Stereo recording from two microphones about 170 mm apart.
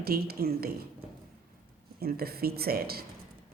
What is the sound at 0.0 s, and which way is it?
Speech, 65° right (ahead or behind).